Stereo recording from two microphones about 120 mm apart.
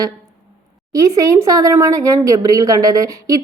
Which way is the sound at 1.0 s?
30° right (ahead or behind).